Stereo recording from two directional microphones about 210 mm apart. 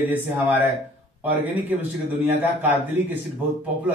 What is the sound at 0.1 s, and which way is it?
A man's voice, 10° right (ahead or behind).